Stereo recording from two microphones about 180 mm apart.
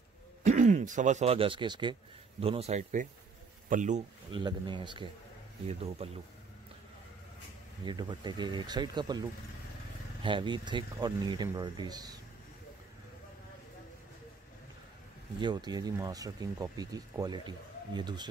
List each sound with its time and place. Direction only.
0.4 s a man's voice: 40° right (ahead or behind)
4.3 s speech: 25° right (ahead or behind)
7.8 s speech: 25° right (ahead or behind)
10.2 s speech: 25° right (ahead or behind)
15.4 s speech: 25° right (ahead or behind)